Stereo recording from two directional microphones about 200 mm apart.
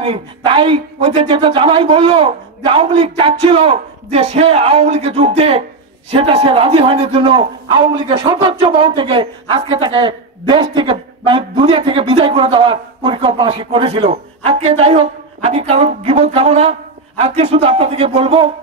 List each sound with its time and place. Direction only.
0.0 s a man's voice: 25° right (ahead or behind)